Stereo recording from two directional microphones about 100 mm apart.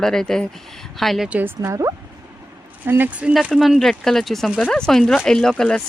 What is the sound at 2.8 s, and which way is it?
Speech, 20° right (ahead or behind).